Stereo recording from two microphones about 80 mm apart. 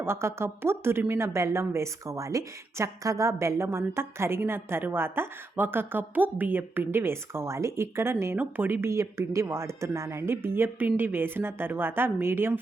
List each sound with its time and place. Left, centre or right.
0.0 s a woman's voice: right